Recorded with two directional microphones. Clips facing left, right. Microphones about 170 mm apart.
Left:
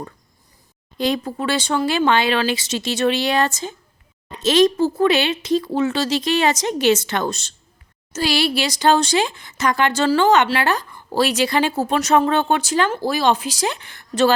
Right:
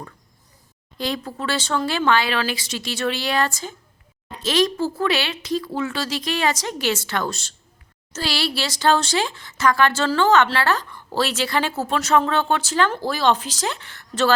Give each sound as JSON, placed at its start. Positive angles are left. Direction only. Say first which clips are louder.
{"t": 0.9, "sound": "speech", "louder": "left 5 dB", "side_deg": 20}